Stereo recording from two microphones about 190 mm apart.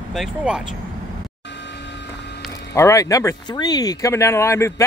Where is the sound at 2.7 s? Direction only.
15° left (ahead or behind).